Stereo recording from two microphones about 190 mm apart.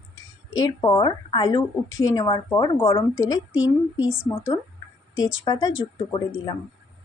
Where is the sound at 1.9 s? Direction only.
90° left.